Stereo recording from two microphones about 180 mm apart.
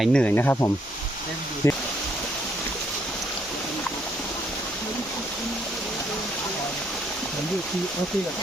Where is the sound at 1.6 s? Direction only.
15° left (ahead or behind).